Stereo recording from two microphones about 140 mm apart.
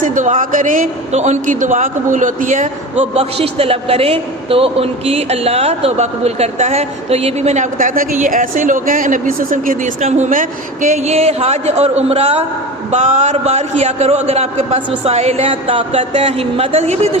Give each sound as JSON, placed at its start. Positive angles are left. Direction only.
{"t": 0.0, "sound": "a man's voice", "side_deg": -65}
{"t": 10.0, "sound": "a man's voice", "side_deg": -50}
{"t": 10.2, "sound": "a man's voice", "side_deg": -75}
{"t": 12.9, "sound": "a man's voice", "side_deg": -55}